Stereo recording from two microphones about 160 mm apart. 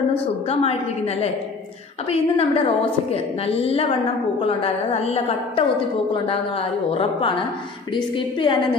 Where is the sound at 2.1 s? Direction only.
35° left (ahead or behind).